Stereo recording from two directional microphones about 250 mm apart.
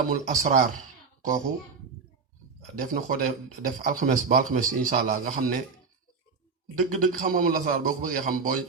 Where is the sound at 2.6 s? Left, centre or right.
Right.